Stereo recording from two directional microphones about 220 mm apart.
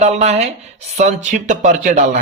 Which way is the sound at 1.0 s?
30° right (ahead or behind).